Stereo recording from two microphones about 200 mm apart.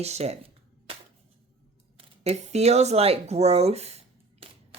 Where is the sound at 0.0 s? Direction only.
30° right (ahead or behind).